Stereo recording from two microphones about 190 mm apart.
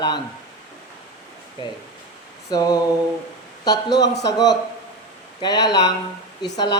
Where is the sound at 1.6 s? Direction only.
25° left (ahead or behind).